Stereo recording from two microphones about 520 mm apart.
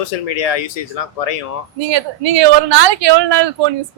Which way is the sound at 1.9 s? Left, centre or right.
Right.